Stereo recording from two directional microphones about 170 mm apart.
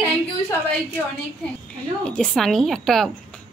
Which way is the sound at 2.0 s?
5° left (ahead or behind).